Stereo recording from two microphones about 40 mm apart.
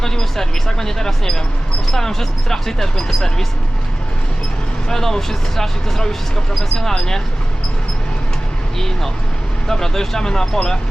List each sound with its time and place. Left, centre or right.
0.0 s speech: centre
4.9 s speech: centre
9.6 s speech: centre